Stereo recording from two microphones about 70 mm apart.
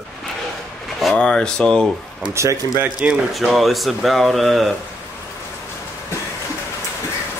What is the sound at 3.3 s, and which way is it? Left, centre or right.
Speech, centre.